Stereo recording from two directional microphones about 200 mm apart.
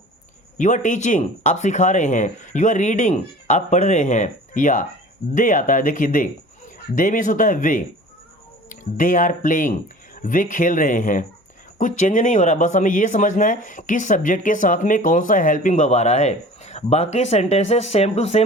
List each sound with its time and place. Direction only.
0.6 s speech: 40° left (ahead or behind)